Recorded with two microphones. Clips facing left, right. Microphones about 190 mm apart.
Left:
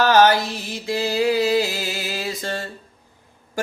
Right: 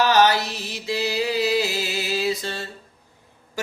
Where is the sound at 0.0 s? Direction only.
45° left (ahead or behind).